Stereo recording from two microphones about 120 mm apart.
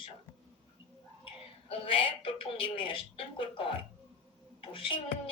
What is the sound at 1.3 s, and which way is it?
A woman's voice, 45° left (ahead or behind).